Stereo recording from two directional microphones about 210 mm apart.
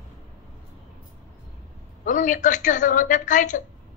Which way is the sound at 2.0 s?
40° left (ahead or behind).